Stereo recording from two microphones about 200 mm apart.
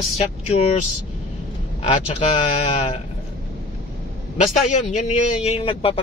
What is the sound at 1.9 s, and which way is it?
A man's voice, 30° left (ahead or behind).